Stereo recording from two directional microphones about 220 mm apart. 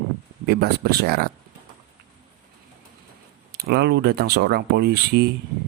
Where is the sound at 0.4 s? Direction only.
45° right (ahead or behind).